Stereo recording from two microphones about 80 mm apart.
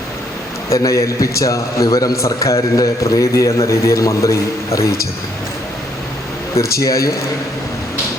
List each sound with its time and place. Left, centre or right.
0.7 s a man's voice: left
6.6 s speech: left